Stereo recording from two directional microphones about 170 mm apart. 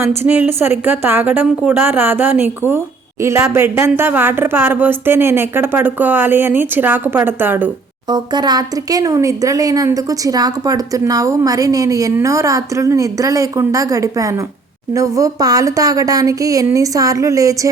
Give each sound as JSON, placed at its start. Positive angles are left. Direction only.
{"t": 0.2, "sound": "a woman's voice", "side_deg": -10}
{"t": 8.0, "sound": "speech", "side_deg": -25}